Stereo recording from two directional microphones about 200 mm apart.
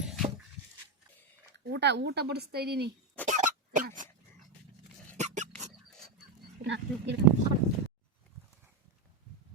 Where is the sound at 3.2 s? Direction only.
40° right (ahead or behind).